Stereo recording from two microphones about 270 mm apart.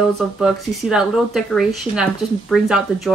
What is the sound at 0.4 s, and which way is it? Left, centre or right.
Speech, centre.